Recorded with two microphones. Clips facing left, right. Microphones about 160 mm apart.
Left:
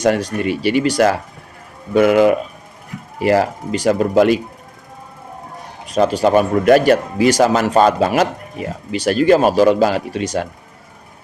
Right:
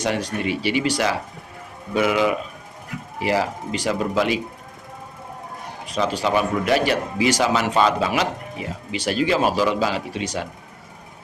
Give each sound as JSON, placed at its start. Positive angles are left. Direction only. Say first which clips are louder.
{"t": 0.0, "sound": "speech", "louder": "left 7 dB", "side_deg": 45}
{"t": 5.9, "sound": "speech", "louder": "left 8 dB", "side_deg": 45}